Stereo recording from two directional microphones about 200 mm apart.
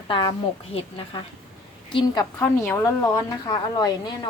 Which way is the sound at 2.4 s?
10° left (ahead or behind).